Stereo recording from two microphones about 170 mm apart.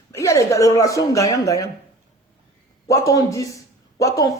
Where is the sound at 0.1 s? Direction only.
15° left (ahead or behind).